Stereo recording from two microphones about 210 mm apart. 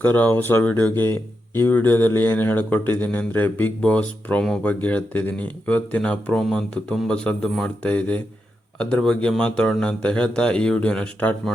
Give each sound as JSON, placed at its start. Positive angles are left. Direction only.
{"t": 0.0, "sound": "speech", "side_deg": 10}